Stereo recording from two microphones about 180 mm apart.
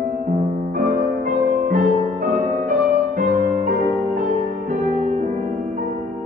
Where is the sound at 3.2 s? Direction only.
45° right (ahead or behind).